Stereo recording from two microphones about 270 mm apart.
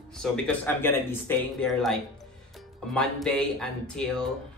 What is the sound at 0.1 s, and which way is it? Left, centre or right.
Speech, centre.